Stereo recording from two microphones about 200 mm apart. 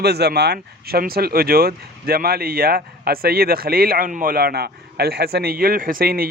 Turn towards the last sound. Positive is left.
turn(degrees=-50)  # may be behind; listen again after turning